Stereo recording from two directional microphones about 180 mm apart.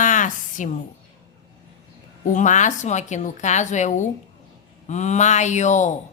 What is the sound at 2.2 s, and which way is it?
A woman's voice, 45° left (ahead or behind).